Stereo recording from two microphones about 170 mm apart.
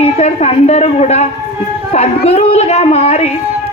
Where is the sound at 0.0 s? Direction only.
40° left (ahead or behind).